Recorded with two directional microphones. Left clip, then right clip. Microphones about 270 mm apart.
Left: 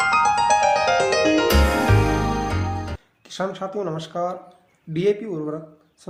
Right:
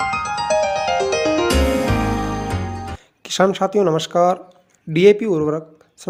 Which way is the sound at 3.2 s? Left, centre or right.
Right.